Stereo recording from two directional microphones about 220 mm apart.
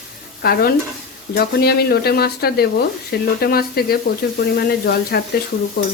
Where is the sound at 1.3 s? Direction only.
45° left (ahead or behind).